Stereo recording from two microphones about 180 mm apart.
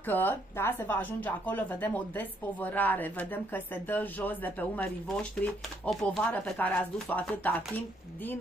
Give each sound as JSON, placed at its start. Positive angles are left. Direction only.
{"t": 0.0, "sound": "speech", "side_deg": 10}